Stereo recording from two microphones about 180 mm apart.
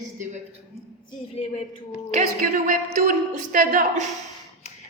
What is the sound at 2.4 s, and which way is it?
A woman's voice, 50° right (ahead or behind).